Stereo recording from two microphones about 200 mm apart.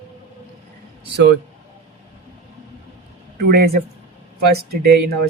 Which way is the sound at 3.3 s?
50° right (ahead or behind).